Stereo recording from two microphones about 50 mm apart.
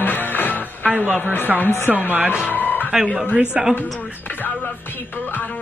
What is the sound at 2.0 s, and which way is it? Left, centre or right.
Speech, right.